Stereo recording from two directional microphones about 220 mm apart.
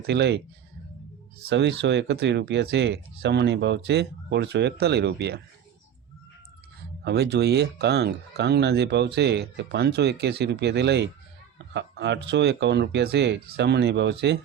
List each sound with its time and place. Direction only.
0.0 s speech: 50° right (ahead or behind)
1.5 s speech: 50° right (ahead or behind)
7.0 s speech: 50° right (ahead or behind)